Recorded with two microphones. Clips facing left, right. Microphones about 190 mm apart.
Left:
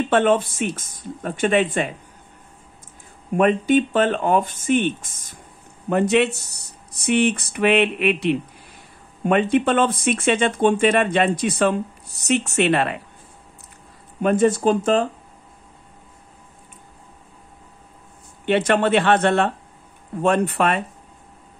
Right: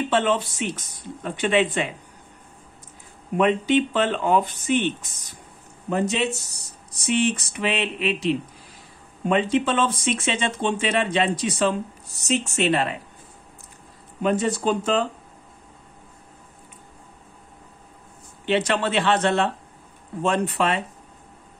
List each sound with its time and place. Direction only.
0.1 s speech: 50° left (ahead or behind)
3.3 s speech: 50° left (ahead or behind)
5.9 s speech: 65° left (ahead or behind)
14.2 s speech: 50° left (ahead or behind)
18.4 s speech: 55° left (ahead or behind)